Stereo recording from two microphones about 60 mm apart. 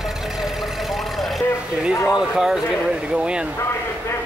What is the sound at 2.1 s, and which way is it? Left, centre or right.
Speech, centre.